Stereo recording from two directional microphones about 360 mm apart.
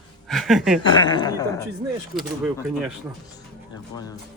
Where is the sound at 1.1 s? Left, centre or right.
Centre.